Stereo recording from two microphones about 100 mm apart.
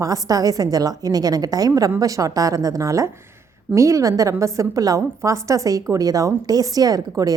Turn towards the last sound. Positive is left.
turn(degrees=-35)  # may be behind; listen again after turning